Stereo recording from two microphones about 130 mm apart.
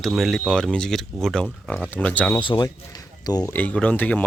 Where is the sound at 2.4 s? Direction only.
35° left (ahead or behind).